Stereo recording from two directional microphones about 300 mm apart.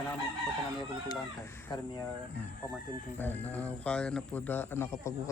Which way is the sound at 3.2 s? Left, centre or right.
Centre.